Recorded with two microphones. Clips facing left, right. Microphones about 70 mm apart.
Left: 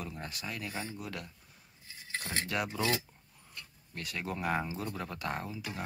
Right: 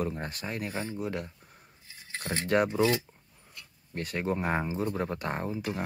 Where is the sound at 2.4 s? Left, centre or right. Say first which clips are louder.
Right 13 dB; right.